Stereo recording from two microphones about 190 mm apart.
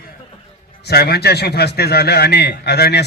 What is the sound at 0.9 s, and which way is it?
A man's voice, 55° left (ahead or behind).